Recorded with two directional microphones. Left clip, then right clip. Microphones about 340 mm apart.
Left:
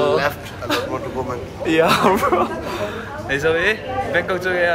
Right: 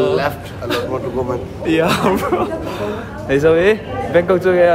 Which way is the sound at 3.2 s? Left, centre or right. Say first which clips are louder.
Right 6 dB; centre.